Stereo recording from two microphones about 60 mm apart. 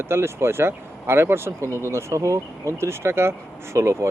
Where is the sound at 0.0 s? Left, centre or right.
Right.